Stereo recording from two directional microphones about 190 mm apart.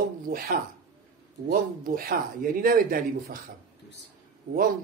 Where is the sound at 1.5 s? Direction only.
50° right (ahead or behind).